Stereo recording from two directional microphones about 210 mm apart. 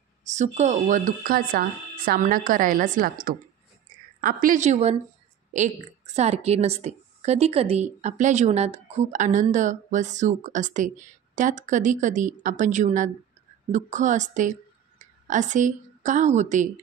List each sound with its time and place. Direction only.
0.2 s a woman's voice: 35° right (ahead or behind)